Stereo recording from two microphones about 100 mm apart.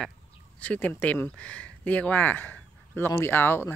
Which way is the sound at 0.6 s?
15° left (ahead or behind).